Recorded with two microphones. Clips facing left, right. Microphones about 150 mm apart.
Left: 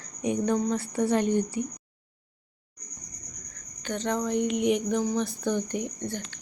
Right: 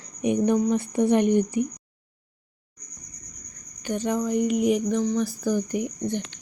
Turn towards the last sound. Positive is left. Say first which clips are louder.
# right 5 dB
turn(degrees=-15)  # may be behind; listen again after turning